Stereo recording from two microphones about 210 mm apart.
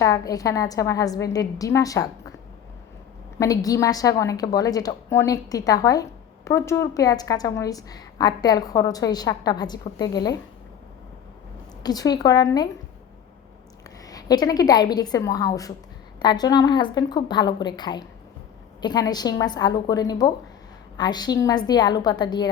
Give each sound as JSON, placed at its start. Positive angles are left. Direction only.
{"t": 0.0, "sound": "a woman's voice", "side_deg": 15}
{"t": 3.3, "sound": "a woman's voice", "side_deg": 15}
{"t": 11.8, "sound": "a woman's voice", "side_deg": 20}
{"t": 14.0, "sound": "a woman's voice", "side_deg": 15}